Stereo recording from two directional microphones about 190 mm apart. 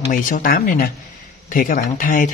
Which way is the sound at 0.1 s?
45° left (ahead or behind).